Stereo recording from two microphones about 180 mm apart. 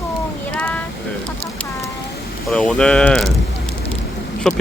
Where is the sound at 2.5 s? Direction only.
5° left (ahead or behind).